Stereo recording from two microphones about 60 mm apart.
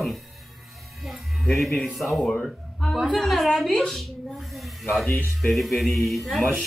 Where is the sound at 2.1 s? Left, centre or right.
Centre.